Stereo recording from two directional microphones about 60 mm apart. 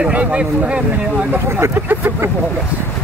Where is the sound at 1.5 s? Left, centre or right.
Right.